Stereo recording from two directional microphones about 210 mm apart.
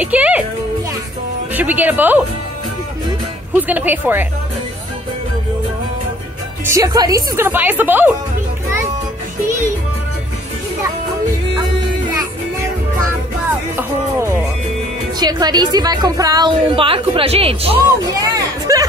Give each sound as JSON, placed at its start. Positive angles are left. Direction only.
{"t": 0.0, "sound": "a child's voice", "side_deg": -5}
{"t": 1.5, "sound": "a woman's voice", "side_deg": -10}
{"t": 3.5, "sound": "a woman's voice", "side_deg": -10}
{"t": 6.6, "sound": "a woman's voice", "side_deg": -15}
{"t": 13.7, "sound": "a woman's voice", "side_deg": -10}